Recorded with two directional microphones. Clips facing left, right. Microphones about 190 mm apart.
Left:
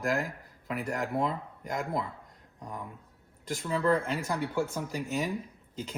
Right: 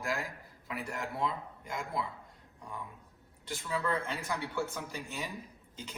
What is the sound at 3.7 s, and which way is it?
Speech, 35° left (ahead or behind).